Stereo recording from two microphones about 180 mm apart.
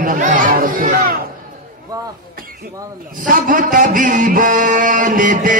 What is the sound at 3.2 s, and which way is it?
Music, 50° right (ahead or behind).